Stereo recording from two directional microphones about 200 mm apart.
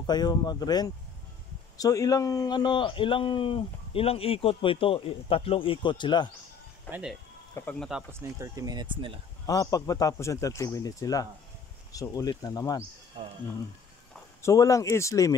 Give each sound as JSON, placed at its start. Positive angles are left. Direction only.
{"t": 0.0, "sound": "speech", "side_deg": 20}
{"t": 6.9, "sound": "speech", "side_deg": -5}
{"t": 7.5, "sound": "speech", "side_deg": 10}
{"t": 7.9, "sound": "speech", "side_deg": -10}
{"t": 9.5, "sound": "speech", "side_deg": 15}
{"t": 14.4, "sound": "speech", "side_deg": 15}